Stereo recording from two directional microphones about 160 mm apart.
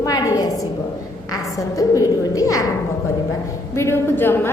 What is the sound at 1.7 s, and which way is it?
A woman's voice, 20° left (ahead or behind).